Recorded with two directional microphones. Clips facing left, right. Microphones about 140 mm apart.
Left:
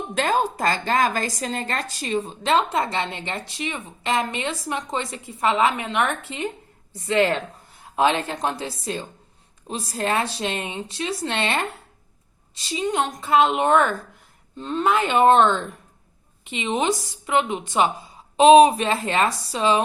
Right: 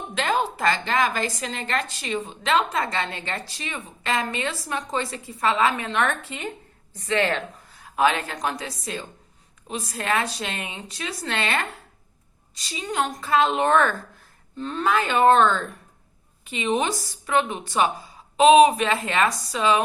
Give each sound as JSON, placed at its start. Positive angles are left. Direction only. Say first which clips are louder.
{"t": 0.1, "sound": "a woman's voice", "louder": "left 2 dB", "side_deg": 40}
{"t": 7.8, "sound": "a woman's voice", "louder": "left 1 dB", "side_deg": 25}